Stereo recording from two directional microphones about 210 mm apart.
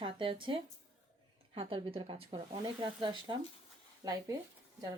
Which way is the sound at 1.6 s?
25° right (ahead or behind).